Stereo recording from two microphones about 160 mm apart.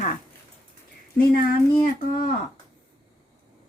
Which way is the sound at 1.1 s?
70° left (ahead or behind).